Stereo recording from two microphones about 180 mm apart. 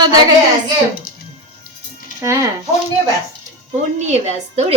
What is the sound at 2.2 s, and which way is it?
Speech, 15° right (ahead or behind).